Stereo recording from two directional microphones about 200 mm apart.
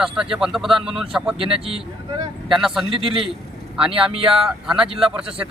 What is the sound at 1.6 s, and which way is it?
Speech, 25° right (ahead or behind).